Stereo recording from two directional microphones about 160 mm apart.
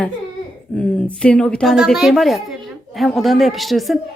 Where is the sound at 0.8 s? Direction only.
5° left (ahead or behind).